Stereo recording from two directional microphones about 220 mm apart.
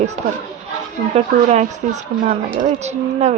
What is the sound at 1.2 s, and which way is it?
Speech, 30° right (ahead or behind).